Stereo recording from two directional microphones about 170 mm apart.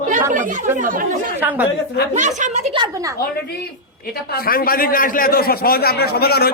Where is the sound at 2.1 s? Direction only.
45° right (ahead or behind).